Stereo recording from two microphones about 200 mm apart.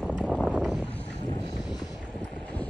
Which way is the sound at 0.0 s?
5° left (ahead or behind).